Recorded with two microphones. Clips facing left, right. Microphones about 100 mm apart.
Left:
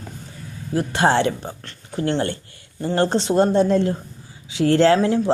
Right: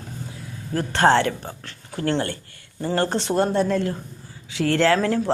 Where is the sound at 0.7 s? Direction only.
10° left (ahead or behind).